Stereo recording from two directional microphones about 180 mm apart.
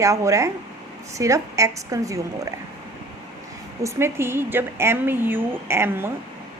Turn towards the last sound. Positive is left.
turn(degrees=-15)  # may be behind; listen again after turning